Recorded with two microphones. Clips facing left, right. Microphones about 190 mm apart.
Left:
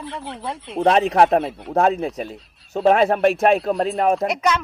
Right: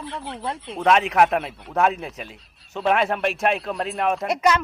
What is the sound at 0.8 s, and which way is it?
Speech, 35° left (ahead or behind).